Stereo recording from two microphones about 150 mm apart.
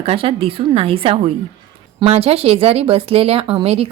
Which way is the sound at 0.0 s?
40° right (ahead or behind).